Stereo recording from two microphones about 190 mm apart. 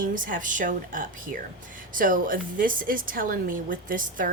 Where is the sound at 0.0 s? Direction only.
45° right (ahead or behind).